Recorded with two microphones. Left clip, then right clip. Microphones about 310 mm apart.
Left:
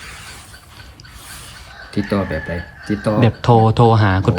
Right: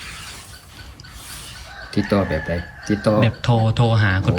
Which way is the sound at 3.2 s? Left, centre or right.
Centre.